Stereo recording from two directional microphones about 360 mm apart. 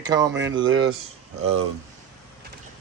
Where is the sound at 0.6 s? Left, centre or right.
Right.